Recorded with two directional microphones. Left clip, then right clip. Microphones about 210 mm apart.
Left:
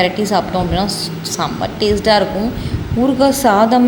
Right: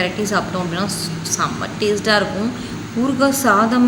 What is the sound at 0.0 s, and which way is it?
A woman's voice, 15° left (ahead or behind).